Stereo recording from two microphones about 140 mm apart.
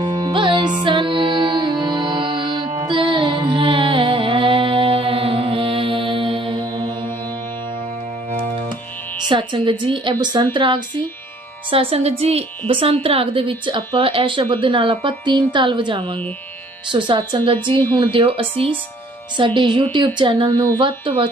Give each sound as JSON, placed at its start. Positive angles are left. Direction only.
{"t": 0.0, "sound": "music", "side_deg": -30}
{"t": 9.3, "sound": "a woman's voice", "side_deg": -35}